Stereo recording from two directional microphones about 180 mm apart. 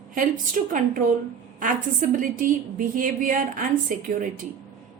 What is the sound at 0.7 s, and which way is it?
A woman's voice, 45° right (ahead or behind).